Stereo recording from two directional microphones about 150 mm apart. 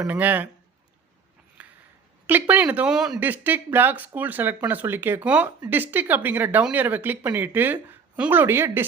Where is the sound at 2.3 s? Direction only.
10° right (ahead or behind).